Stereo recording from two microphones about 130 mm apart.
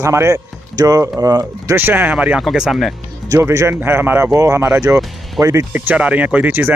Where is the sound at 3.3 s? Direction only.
25° right (ahead or behind).